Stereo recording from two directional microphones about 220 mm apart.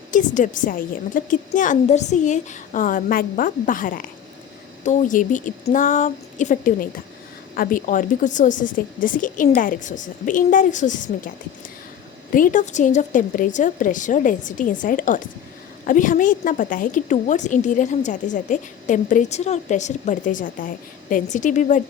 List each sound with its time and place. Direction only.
0.1 s a woman's voice: 35° left (ahead or behind)
12.3 s a woman's voice: 40° left (ahead or behind)